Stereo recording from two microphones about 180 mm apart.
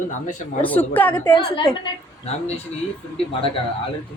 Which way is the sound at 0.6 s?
10° left (ahead or behind).